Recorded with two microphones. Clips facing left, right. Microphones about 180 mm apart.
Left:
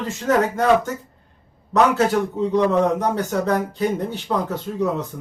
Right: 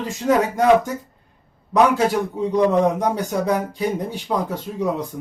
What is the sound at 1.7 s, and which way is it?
A man's voice, 10° right (ahead or behind).